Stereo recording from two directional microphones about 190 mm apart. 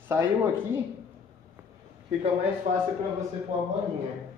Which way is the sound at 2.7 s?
40° right (ahead or behind).